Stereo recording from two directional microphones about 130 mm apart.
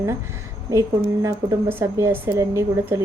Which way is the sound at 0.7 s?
25° right (ahead or behind).